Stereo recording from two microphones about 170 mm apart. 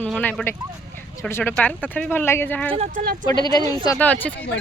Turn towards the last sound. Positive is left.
turn(degrees=10)  # may be behind; listen again after turning